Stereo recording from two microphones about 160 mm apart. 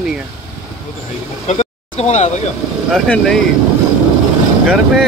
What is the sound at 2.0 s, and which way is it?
Speech, 45° left (ahead or behind).